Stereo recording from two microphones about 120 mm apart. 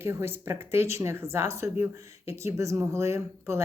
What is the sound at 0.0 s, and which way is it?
Speech, 20° right (ahead or behind).